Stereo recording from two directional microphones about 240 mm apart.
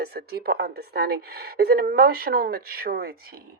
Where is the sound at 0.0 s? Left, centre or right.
Right.